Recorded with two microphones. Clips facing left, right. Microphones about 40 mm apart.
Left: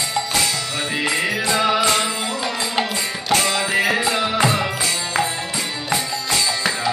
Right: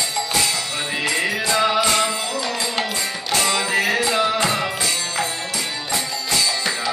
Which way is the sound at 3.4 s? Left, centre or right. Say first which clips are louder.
Left 1 dB; centre.